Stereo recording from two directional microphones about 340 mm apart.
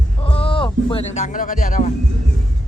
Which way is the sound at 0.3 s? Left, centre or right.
Centre.